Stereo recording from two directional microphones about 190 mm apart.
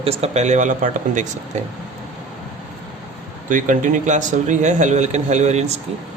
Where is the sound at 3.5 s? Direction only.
45° right (ahead or behind).